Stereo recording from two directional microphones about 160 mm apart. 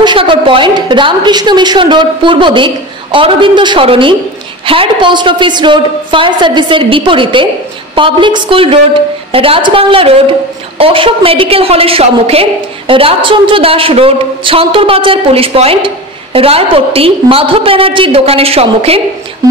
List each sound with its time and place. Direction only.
0.0 s a woman's voice: 30° right (ahead or behind)